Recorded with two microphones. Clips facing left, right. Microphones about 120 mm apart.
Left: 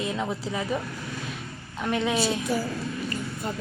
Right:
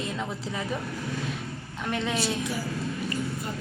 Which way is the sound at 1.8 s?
5° left (ahead or behind).